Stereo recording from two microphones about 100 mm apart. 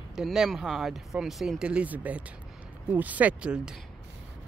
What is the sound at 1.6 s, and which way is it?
Speech, 15° right (ahead or behind).